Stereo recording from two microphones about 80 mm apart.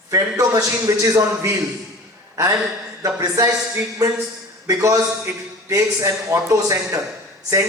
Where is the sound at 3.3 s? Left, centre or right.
Right.